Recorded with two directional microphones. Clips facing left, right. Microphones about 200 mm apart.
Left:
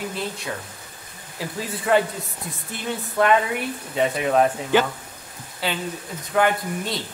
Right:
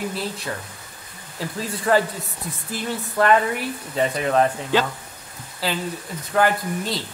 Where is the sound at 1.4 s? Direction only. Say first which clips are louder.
Right 2 dB; centre (ahead or behind).